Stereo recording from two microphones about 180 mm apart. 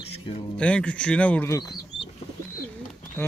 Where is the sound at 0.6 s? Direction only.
5° left (ahead or behind).